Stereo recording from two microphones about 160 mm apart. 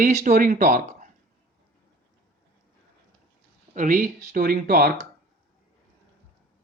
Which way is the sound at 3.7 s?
55° right (ahead or behind).